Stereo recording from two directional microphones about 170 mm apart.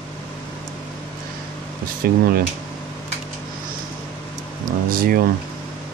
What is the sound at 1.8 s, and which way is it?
Speech, 60° right (ahead or behind).